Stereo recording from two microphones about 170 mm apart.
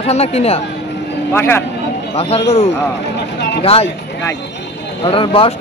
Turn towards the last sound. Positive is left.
turn(degrees=30)  # may be behind; listen again after turning